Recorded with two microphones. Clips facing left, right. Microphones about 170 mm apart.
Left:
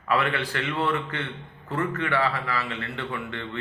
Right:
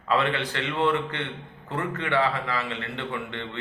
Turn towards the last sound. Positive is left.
turn(degrees=-20)  # may be behind; listen again after turning